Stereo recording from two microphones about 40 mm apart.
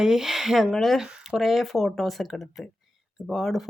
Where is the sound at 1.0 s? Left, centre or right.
Centre.